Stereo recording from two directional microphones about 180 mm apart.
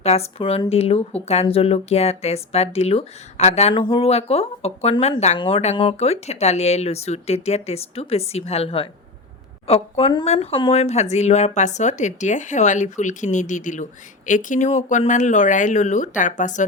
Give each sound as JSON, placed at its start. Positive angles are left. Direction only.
{"t": 0.0, "sound": "speech", "side_deg": 35}